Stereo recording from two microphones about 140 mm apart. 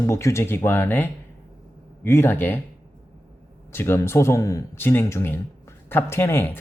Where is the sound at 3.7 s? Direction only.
20° left (ahead or behind).